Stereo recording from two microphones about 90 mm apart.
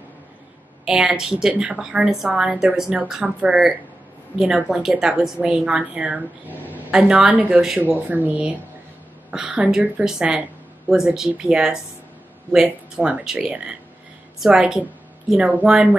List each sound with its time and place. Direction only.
0.8 s a woman's voice: 5° right (ahead or behind)